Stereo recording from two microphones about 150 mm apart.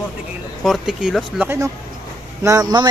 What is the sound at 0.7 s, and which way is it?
Speech, centre (ahead or behind).